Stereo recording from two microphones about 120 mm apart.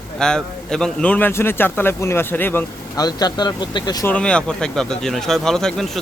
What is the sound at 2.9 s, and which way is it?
Speech, 35° left (ahead or behind).